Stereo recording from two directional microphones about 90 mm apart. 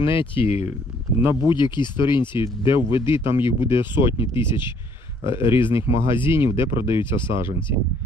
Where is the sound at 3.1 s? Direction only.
30° right (ahead or behind).